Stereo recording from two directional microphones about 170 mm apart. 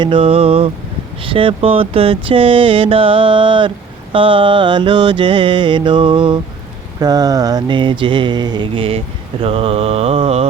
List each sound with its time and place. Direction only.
0.0 s mantra: 30° right (ahead or behind)